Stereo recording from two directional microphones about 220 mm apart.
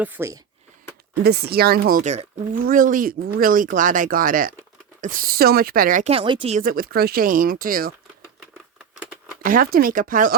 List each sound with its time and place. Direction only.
0.0 s speech: 10° right (ahead or behind)
1.2 s speech: 45° right (ahead or behind); by 6.6 s 25° right (ahead or behind)
6.6 s speech: 40° right (ahead or behind)
9.4 s speech: 40° right (ahead or behind)